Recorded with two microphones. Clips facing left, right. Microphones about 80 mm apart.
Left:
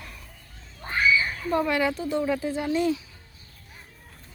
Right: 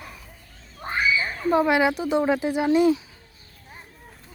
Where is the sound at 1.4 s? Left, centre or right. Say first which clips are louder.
Right 5 dB; centre.